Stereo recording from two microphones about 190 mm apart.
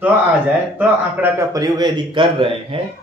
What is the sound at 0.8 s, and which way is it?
A man's voice, 10° right (ahead or behind).